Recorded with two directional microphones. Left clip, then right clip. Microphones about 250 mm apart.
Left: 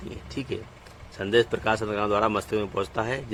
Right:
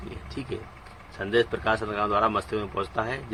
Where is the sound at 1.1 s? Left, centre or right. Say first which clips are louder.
Left 2 dB; left.